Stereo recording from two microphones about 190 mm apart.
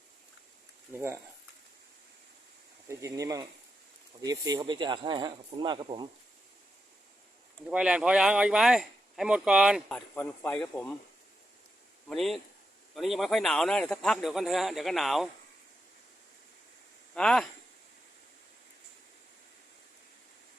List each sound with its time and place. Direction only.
0.9 s speech: 15° right (ahead or behind)
3.0 s speech: 15° right (ahead or behind)
7.7 s speech: 5° right (ahead or behind)
9.9 s speech: 10° left (ahead or behind)
12.0 s speech: centre (ahead or behind)
17.2 s speech: 5° left (ahead or behind)